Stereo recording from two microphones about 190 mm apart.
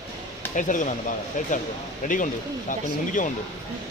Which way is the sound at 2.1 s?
45° left (ahead or behind).